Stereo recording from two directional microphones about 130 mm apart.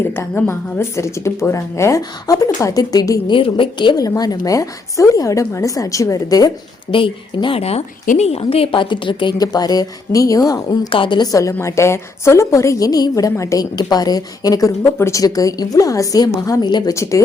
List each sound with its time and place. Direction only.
0.2 s a woman's voice: 20° left (ahead or behind)
6.9 s a woman's voice: 40° left (ahead or behind)
10.8 s a woman's voice: 40° left (ahead or behind)
16.9 s a woman's voice: 25° left (ahead or behind)